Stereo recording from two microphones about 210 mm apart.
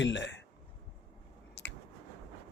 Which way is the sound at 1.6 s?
55° left (ahead or behind).